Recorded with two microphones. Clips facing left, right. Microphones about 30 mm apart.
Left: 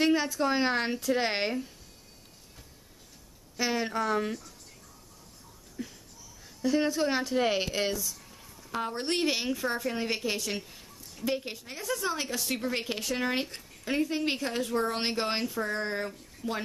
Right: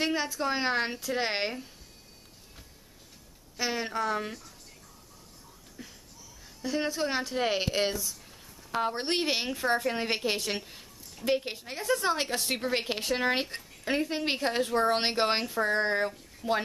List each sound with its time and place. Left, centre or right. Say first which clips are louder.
0.0 s speech: left 3 dB; centre
3.5 s speech: left 1 dB; centre
5.8 s a sound: left 7 dB; centre
6.4 s a woman's voice: left 4 dB; centre; by 16.6 s right